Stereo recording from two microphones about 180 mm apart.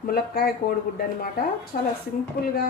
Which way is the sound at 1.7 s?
45° left (ahead or behind).